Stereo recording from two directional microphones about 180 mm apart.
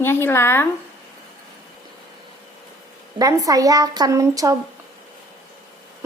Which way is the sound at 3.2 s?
20° right (ahead or behind).